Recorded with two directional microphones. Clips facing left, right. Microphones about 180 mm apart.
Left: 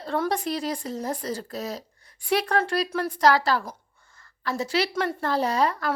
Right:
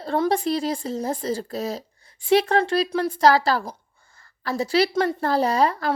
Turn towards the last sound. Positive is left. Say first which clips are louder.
# right 3 dB
turn(degrees=-30)  # may be behind; listen again after turning